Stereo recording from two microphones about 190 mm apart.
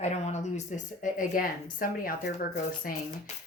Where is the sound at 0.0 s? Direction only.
35° left (ahead or behind).